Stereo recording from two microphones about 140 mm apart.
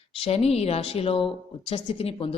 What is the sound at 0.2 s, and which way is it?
Speech, 45° left (ahead or behind).